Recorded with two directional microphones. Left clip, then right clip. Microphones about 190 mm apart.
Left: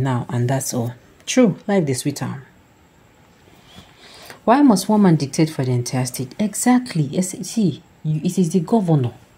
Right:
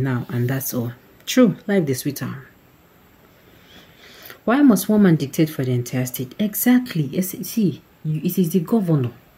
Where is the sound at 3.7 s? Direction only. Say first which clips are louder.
Left 2 dB; 10° left (ahead or behind).